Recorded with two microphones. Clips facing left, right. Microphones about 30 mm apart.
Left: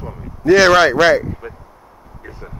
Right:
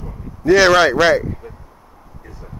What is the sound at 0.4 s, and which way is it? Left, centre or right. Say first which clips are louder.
Speech: left 1 dB; centre.